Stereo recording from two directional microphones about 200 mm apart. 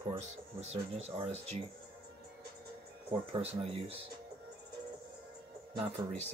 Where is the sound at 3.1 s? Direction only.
30° right (ahead or behind).